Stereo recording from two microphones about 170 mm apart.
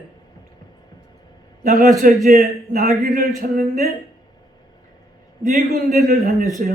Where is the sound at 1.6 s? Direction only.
50° right (ahead or behind).